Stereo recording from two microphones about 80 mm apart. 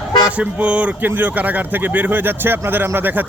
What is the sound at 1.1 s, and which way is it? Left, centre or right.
Speech, right.